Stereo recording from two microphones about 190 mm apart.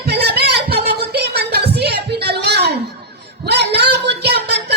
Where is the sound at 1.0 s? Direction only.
60° right (ahead or behind).